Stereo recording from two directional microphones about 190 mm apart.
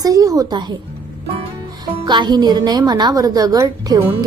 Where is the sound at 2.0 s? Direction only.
25° right (ahead or behind).